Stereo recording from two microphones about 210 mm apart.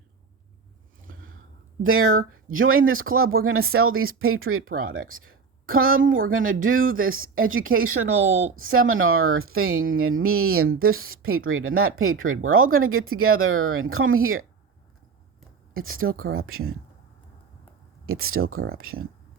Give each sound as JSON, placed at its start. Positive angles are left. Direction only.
{"t": 1.0, "sound": "a sound", "side_deg": -70}
{"t": 1.8, "sound": "speech", "side_deg": -75}
{"t": 15.8, "sound": "speech", "side_deg": -80}
{"t": 18.0, "sound": "speech", "side_deg": -85}